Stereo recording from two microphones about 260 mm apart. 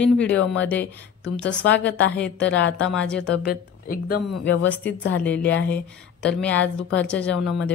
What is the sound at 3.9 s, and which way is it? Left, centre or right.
Speech, left.